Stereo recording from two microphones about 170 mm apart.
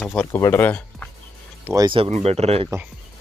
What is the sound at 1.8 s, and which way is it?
Speech, 30° right (ahead or behind).